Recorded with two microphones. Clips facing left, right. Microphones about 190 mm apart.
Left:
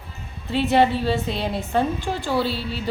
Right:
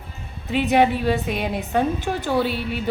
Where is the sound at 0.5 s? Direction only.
15° right (ahead or behind).